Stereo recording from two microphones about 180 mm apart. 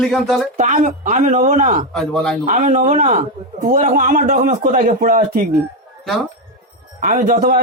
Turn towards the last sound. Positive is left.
turn(degrees=-50)  # may be behind; listen again after turning